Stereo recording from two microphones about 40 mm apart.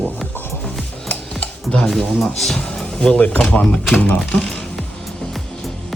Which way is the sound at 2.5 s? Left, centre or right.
Left.